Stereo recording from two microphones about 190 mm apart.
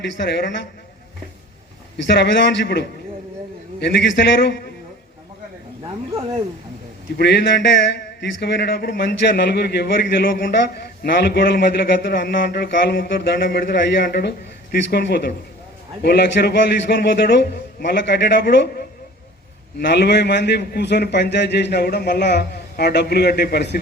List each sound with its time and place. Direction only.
0.0 s a man's voice: 65° left (ahead or behind)
2.0 s a man's voice: 65° left (ahead or behind)
7.2 s a man's voice: 65° left (ahead or behind)